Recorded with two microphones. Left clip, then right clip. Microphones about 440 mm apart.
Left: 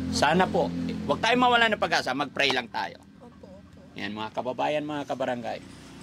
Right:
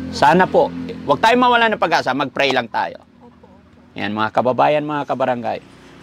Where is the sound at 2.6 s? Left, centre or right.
Right.